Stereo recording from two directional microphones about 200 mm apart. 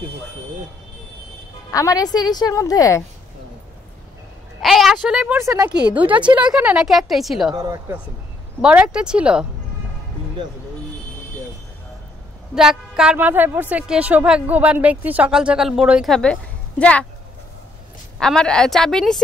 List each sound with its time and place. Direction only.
1.7 s a woman's voice: 15° left (ahead or behind)
4.6 s a woman's voice: centre (ahead or behind)
7.5 s speech: 15° right (ahead or behind)
8.5 s a woman's voice: 5° right (ahead or behind)
12.5 s a woman's voice: 5° right (ahead or behind)
18.2 s a woman's voice: 5° left (ahead or behind)